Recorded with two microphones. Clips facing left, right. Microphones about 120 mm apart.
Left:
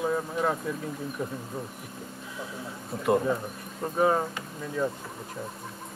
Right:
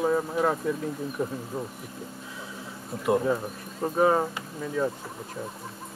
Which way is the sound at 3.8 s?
15° right (ahead or behind).